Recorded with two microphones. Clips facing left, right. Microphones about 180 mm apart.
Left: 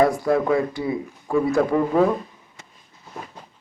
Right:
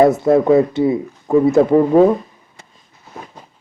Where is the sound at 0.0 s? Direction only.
25° right (ahead or behind).